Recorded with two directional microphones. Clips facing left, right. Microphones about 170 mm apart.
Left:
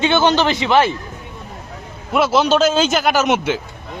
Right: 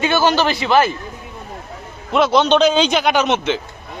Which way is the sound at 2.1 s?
5° left (ahead or behind).